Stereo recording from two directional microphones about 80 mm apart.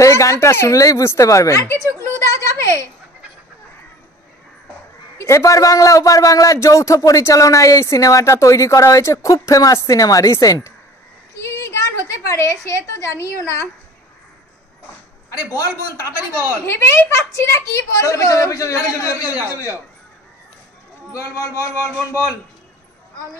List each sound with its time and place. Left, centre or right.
0.0 s a woman's voice: left
1.8 s a sound: right
2.1 s a sound: left
5.1 s a man's voice: left
11.4 s a sound: left
12.3 s a man's voice: left
15.2 s a man's voice: left
16.6 s a woman's voice: left
19.2 s a man's voice: right
21.1 s a man's voice: left